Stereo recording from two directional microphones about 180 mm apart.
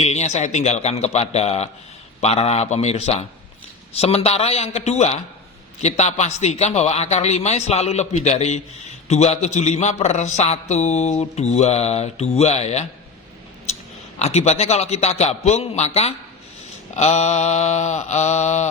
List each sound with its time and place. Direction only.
0.0 s a man's voice: 40° left (ahead or behind)
14.2 s a man's voice: 35° left (ahead or behind)